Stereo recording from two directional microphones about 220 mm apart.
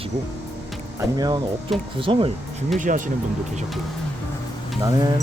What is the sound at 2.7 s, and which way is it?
Speech, 35° right (ahead or behind).